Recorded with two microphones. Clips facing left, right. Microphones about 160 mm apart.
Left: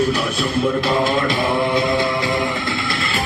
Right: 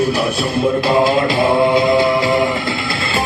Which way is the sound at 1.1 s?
35° right (ahead or behind).